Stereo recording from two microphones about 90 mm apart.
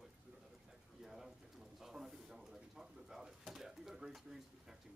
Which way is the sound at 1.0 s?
5° right (ahead or behind).